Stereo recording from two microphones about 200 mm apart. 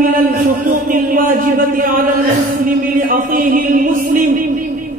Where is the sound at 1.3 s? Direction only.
45° right (ahead or behind).